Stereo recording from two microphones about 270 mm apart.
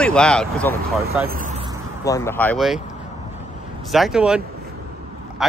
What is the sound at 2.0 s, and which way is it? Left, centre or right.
Speech, centre.